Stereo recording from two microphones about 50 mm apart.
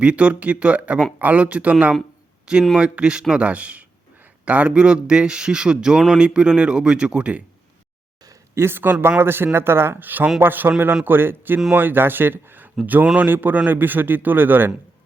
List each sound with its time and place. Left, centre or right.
0.0 s a man's voice: right
2.7 s a man's voice: right
8.5 s a man's voice: right